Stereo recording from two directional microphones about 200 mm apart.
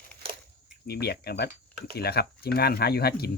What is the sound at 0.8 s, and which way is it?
Speech, 50° left (ahead or behind).